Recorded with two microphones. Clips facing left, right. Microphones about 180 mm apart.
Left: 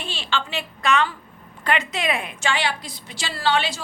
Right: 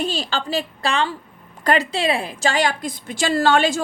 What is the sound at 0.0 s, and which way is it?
A woman's voice, 40° right (ahead or behind).